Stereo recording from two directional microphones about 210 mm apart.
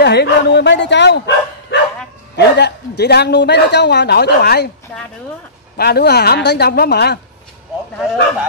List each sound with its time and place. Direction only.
0.0 s a man's voice: 55° left (ahead or behind)
5.8 s a man's voice: 50° left (ahead or behind)
8.0 s speech: 5° right (ahead or behind)